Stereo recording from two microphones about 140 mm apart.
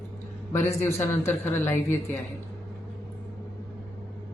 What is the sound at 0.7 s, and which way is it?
Speech, 20° left (ahead or behind).